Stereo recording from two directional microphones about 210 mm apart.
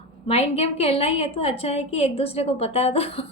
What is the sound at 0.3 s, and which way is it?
A woman's voice, 30° left (ahead or behind).